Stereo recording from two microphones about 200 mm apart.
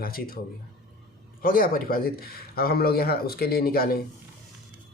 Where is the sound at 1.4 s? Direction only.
45° left (ahead or behind).